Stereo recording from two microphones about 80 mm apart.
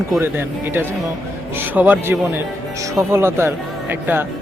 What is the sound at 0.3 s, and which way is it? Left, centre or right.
Speech, right.